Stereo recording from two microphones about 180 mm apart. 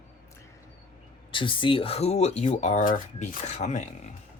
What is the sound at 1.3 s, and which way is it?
Speech, 30° left (ahead or behind).